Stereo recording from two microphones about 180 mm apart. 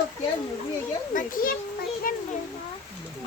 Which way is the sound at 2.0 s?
50° left (ahead or behind).